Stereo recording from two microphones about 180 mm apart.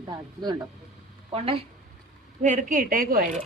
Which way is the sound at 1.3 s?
30° right (ahead or behind).